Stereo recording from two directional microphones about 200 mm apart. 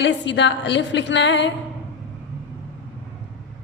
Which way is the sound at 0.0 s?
60° left (ahead or behind).